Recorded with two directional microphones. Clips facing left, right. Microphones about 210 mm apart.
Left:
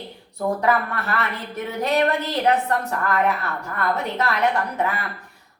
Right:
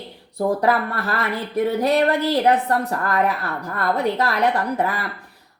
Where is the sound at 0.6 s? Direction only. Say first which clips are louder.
Right 2 dB; 35° right (ahead or behind).